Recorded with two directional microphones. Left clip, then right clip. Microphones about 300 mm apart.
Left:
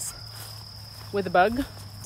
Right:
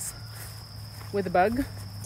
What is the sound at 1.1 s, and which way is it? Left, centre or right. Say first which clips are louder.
Speech: left 2 dB; centre.